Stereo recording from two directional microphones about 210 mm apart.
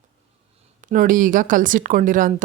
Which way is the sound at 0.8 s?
40° right (ahead or behind).